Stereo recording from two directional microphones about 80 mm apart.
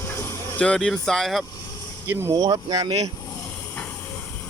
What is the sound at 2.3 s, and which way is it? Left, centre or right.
Speech, right.